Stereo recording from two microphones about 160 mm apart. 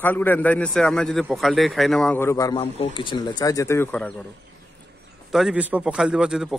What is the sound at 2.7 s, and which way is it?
Speech, 35° left (ahead or behind).